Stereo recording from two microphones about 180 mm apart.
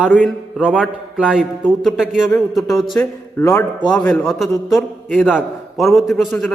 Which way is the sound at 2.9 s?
15° left (ahead or behind).